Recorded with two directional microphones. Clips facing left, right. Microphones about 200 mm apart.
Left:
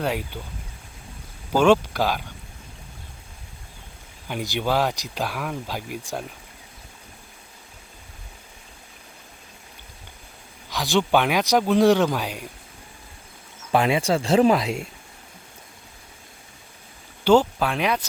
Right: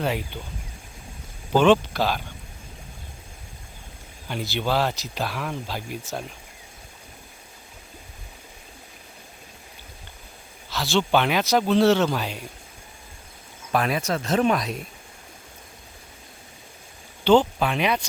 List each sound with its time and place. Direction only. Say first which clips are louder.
0.3 s speech: left 1 dB; 10° left (ahead or behind)
1.5 s speech: even; 10° left (ahead or behind)
4.3 s speech: left 1 dB; 15° left (ahead or behind)
10.7 s speech: left 1 dB; 15° left (ahead or behind)
13.7 s speech: left 4 dB; 25° left (ahead or behind)
17.2 s speech: even; 5° left (ahead or behind)